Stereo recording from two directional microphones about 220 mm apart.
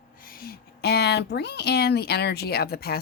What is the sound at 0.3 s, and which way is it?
Speech, 40° left (ahead or behind).